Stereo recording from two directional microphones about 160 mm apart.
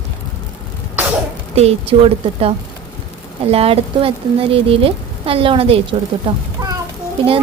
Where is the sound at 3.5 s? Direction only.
35° right (ahead or behind).